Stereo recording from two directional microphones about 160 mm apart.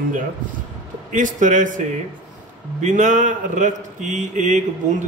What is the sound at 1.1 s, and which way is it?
A man's voice, 55° right (ahead or behind).